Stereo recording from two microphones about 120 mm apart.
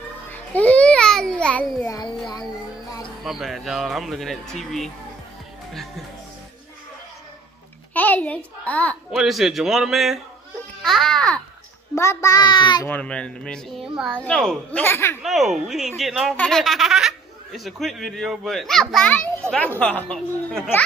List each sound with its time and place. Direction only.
0.3 s babbling: 10° left (ahead or behind)
3.3 s speech: centre (ahead or behind)
7.9 s a child's voice: 15° left (ahead or behind)
9.1 s speech: 5° right (ahead or behind)
11.9 s a child's voice: 25° left (ahead or behind)
12.8 s speech: 10° left (ahead or behind)
14.1 s speech: 10° left (ahead or behind)
15.2 s speech: centre (ahead or behind)